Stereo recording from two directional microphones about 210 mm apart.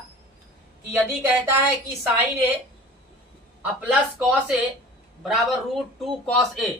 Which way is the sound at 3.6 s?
10° right (ahead or behind).